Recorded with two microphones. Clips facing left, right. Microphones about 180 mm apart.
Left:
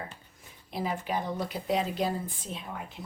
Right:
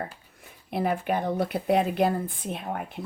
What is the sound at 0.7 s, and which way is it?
Speech, 60° right (ahead or behind).